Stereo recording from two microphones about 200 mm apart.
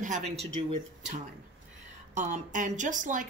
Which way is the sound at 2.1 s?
40° right (ahead or behind).